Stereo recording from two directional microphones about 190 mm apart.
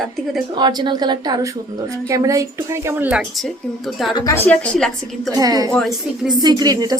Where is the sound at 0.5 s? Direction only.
25° right (ahead or behind); by 4.1 s centre (ahead or behind).